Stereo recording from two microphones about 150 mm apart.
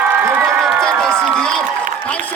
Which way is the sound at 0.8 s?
5° left (ahead or behind).